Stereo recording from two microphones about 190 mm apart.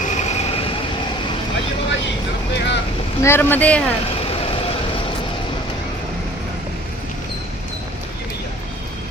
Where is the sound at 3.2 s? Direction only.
10° left (ahead or behind).